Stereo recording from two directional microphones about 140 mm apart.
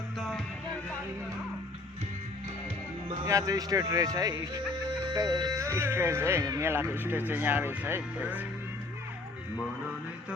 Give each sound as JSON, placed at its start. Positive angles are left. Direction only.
{"t": 0.2, "sound": "music", "side_deg": 0}
{"t": 3.2, "sound": "speech", "side_deg": -25}